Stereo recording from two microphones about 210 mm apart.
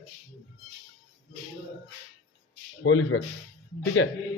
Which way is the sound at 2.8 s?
70° left (ahead or behind).